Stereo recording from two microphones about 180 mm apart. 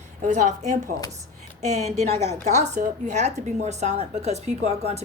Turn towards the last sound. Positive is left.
turn(degrees=-35)  # may be behind; listen again after turning